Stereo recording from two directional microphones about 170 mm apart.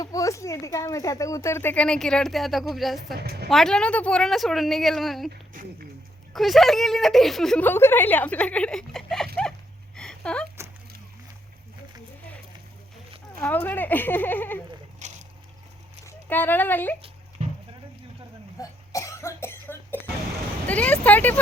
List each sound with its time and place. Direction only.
0.0 s speech: 20° left (ahead or behind); by 3.2 s centre (ahead or behind)
3.2 s a woman's voice: 70° right (ahead or behind)
3.5 s a woman's voice: 5° left (ahead or behind)
6.3 s a woman's voice: centre (ahead or behind)
9.9 s a sound: 5° left (ahead or behind)
13.4 s speech: 10° left (ahead or behind)
15.0 s a sound: 45° right (ahead or behind)
16.0 s speech: 10° left (ahead or behind)
18.5 s cough: 20° left (ahead or behind)
20.7 s speech: 10° left (ahead or behind)